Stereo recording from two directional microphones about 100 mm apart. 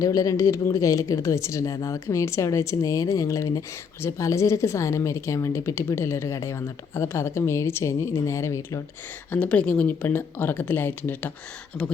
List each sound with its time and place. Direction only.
0.0 s speech: 35° left (ahead or behind)
9.3 s speech: 15° left (ahead or behind)